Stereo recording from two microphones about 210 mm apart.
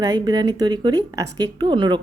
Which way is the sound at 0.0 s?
20° right (ahead or behind).